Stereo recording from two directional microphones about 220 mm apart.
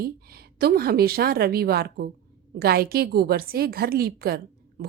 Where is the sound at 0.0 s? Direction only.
45° right (ahead or behind).